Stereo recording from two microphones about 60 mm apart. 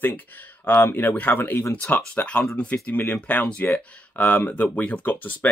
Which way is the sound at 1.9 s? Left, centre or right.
Left.